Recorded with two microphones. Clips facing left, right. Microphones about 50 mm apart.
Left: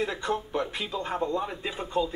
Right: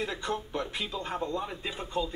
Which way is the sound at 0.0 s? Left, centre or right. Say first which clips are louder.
Left 4 dB; centre.